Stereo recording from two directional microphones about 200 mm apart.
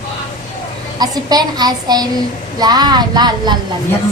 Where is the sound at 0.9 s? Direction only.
20° right (ahead or behind).